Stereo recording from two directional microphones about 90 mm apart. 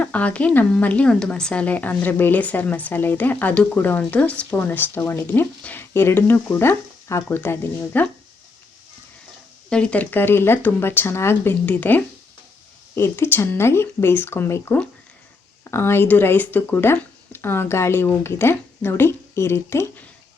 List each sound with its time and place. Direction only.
0.0 s speech: 15° left (ahead or behind)
9.6 s speech: 10° left (ahead or behind); by 19.9 s 30° left (ahead or behind)